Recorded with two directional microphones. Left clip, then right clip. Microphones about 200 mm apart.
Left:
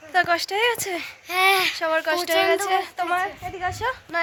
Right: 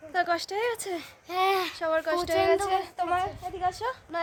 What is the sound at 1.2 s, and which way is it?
Speech, 15° right (ahead or behind).